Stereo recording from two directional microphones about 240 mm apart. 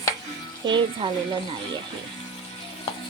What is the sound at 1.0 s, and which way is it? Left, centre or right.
Speech, right.